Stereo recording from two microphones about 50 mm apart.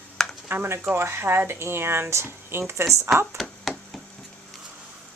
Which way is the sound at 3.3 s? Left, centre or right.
Centre.